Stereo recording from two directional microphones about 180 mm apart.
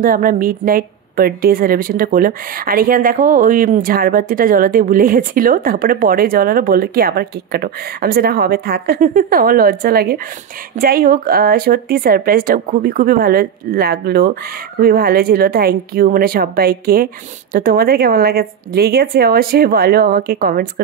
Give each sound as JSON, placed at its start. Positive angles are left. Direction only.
{"t": 0.0, "sound": "a woman's voice", "side_deg": -50}